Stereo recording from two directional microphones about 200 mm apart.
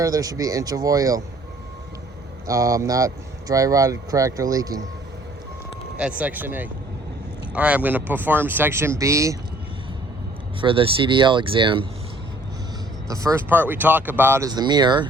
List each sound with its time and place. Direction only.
0.0 s speech: 15° right (ahead or behind)
2.5 s speech: 15° right (ahead or behind)
6.0 s speech: 5° right (ahead or behind)
10.6 s speech: 25° right (ahead or behind)
13.1 s speech: 15° right (ahead or behind)